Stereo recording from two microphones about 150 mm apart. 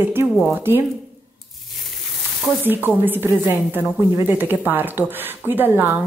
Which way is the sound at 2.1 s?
10° right (ahead or behind).